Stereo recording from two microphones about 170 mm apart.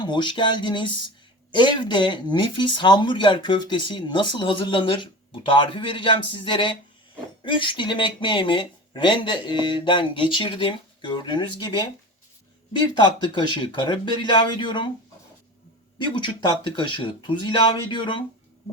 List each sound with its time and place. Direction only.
0.0 s speech: 25° left (ahead or behind)
16.0 s speech: 30° left (ahead or behind)